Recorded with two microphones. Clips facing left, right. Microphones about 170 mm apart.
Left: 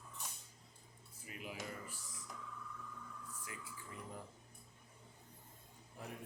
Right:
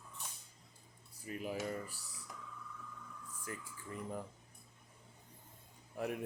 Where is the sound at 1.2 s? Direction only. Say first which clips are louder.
Right 8 dB; 40° right (ahead or behind).